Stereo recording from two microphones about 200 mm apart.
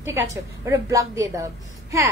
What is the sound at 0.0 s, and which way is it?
A woman's voice, 15° right (ahead or behind).